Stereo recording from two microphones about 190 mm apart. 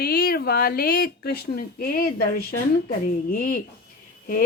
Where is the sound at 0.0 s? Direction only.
50° left (ahead or behind).